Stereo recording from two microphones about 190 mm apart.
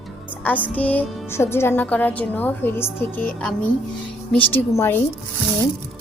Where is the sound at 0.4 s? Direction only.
10° left (ahead or behind).